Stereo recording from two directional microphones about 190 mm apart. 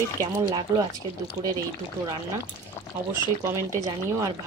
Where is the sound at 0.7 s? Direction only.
15° right (ahead or behind).